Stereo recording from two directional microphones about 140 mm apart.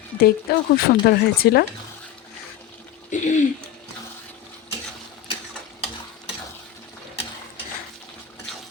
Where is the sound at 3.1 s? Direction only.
65° left (ahead or behind).